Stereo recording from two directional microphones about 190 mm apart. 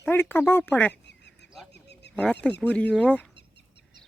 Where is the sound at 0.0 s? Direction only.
10° left (ahead or behind).